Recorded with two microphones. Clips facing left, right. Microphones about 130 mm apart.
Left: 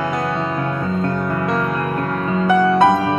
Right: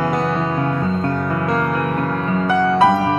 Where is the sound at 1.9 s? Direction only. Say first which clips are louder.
Even; 15° left (ahead or behind).